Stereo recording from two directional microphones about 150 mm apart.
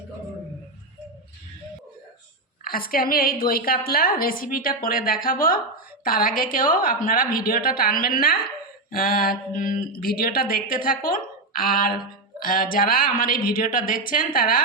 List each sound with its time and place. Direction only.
2.6 s a woman's voice: 75° left (ahead or behind)
9.5 s a woman's voice: 65° left (ahead or behind)